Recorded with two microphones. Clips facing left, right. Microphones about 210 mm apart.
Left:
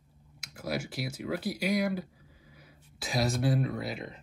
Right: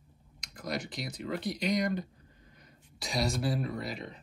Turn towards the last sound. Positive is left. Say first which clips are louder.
# left 2 dB
turn(degrees=5)  # may be behind; listen again after turning